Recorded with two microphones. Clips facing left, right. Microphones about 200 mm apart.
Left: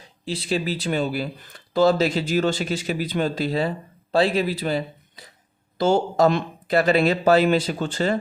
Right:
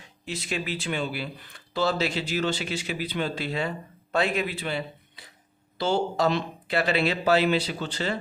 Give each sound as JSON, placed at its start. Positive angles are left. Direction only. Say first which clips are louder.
{"t": 0.0, "sound": "speech", "louder": "left 5 dB", "side_deg": 30}